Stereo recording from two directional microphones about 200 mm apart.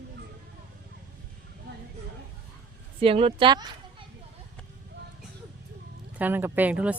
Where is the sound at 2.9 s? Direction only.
30° right (ahead or behind).